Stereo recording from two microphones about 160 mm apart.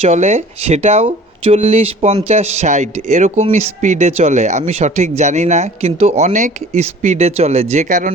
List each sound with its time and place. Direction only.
0.0 s speech: 45° right (ahead or behind)